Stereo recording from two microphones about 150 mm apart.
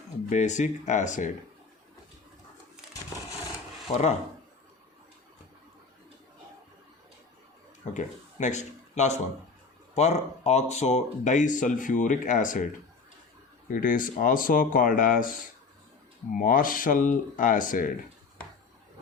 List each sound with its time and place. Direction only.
0.3 s speech: 50° left (ahead or behind)
3.9 s speech: 40° left (ahead or behind)
7.9 s speech: 55° left (ahead or behind)
13.7 s speech: 65° left (ahead or behind)
16.4 s speech: 70° left (ahead or behind)